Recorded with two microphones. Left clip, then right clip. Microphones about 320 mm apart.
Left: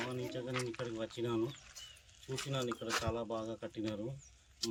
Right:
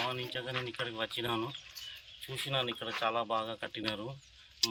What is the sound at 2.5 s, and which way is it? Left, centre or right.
Speech, centre.